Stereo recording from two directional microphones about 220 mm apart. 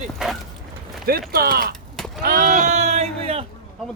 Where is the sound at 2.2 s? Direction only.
40° right (ahead or behind).